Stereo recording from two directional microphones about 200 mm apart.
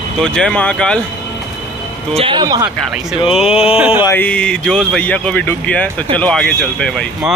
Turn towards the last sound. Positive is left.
turn(degrees=5)  # may be behind; listen again after turning